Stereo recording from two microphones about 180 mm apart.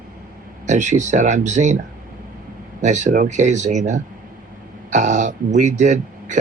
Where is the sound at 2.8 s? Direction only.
40° right (ahead or behind).